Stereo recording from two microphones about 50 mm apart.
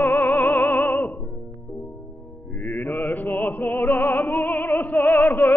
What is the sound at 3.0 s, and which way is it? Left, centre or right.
Music, left.